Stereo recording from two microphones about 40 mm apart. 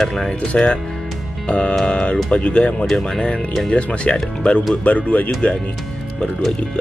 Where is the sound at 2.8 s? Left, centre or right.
Centre; by 5.5 s left.